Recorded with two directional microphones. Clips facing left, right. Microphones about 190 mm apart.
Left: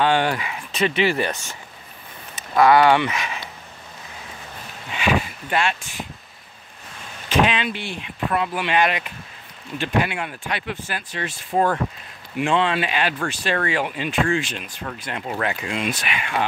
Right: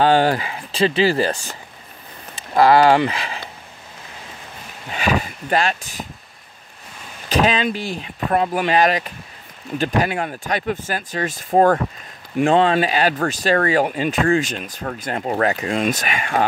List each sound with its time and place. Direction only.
0.0 s speech: 35° right (ahead or behind)
4.9 s speech: 40° right (ahead or behind)
7.2 s speech: 40° right (ahead or behind)